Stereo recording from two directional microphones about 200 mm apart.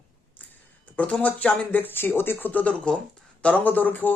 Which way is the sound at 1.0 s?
5° left (ahead or behind).